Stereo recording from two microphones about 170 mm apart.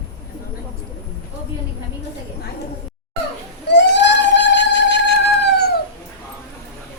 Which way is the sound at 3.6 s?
90° left.